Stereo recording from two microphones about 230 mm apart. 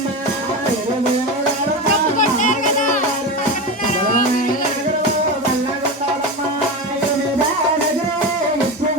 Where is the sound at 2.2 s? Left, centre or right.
Left.